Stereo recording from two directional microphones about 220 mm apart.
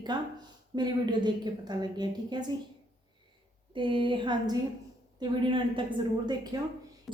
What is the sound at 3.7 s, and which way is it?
A woman's voice, 25° right (ahead or behind).